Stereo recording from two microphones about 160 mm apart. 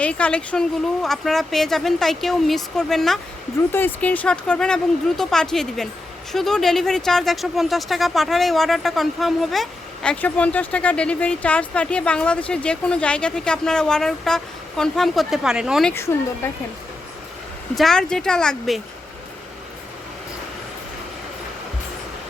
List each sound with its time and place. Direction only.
0.0 s speech: 5° left (ahead or behind)
3.7 s speech: 10° left (ahead or behind); by 15.9 s 5° right (ahead or behind)
15.9 s speech: 15° left (ahead or behind)
17.7 s speech: 5° left (ahead or behind)